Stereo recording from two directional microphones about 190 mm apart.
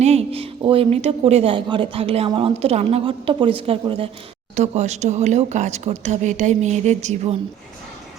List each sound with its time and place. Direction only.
0.0 s speech: 35° right (ahead or behind)